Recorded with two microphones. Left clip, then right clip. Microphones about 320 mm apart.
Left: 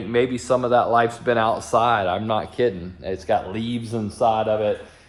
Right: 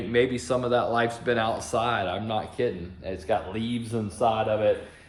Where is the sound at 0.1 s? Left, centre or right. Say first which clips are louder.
Left 4 dB; centre.